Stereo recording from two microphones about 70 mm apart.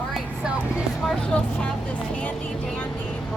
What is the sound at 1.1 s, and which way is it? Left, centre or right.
Speech, centre.